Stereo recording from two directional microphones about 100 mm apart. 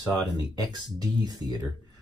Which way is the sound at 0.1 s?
45° right (ahead or behind).